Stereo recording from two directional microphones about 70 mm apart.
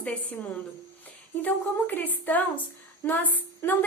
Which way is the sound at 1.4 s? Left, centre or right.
Left.